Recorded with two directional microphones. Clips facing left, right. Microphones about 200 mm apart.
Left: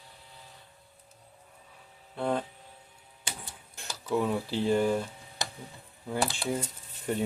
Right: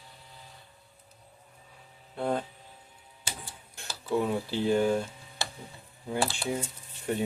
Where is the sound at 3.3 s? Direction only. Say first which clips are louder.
Even; 15° left (ahead or behind).